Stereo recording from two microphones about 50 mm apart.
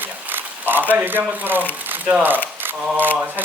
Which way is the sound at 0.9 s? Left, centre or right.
Right.